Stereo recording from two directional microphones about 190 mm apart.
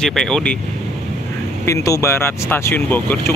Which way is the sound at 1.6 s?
15° left (ahead or behind).